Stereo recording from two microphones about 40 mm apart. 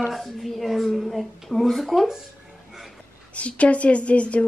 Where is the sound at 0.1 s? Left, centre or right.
Centre.